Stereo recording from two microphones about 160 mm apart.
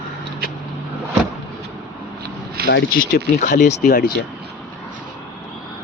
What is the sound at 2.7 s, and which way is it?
Speech, 75° left (ahead or behind).